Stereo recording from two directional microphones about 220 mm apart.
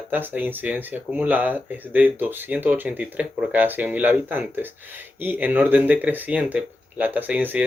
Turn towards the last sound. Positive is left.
turn(degrees=-5)  # may be behind; listen again after turning